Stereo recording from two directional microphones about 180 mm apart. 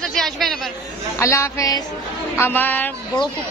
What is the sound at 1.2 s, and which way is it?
Speech, 15° left (ahead or behind).